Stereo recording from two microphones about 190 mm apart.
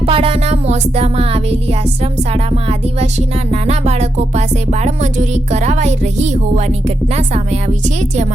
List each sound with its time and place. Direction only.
0.0 s music: 30° right (ahead or behind)